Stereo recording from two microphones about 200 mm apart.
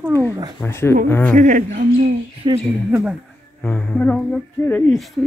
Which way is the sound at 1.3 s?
40° right (ahead or behind).